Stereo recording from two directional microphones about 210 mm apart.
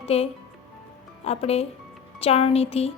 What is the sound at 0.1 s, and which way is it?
A woman's voice, 30° left (ahead or behind).